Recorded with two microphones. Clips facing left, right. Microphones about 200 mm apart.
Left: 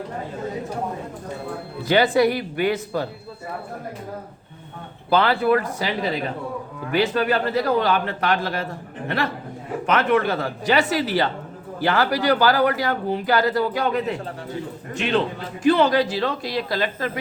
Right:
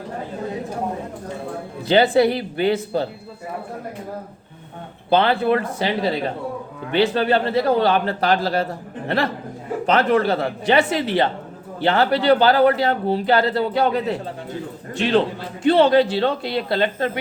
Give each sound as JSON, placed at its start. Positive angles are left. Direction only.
{"t": 1.9, "sound": "speech", "side_deg": -30}
{"t": 5.1, "sound": "a man's voice", "side_deg": -25}